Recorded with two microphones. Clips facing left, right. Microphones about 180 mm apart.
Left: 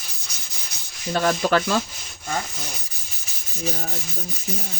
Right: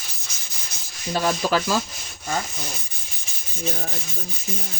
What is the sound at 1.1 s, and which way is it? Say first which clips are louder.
Rub: left 2 dB; 55° left (ahead or behind).